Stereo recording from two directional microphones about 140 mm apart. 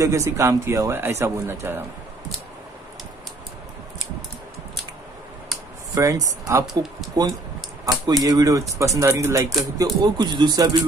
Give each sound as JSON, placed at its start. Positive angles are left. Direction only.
{"t": 0.0, "sound": "speech", "side_deg": -20}
{"t": 5.9, "sound": "speech", "side_deg": -25}